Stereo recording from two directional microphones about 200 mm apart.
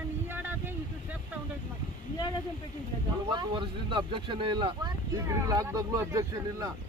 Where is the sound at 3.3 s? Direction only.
25° right (ahead or behind).